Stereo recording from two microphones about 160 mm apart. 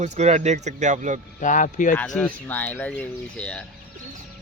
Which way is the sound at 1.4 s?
55° left (ahead or behind).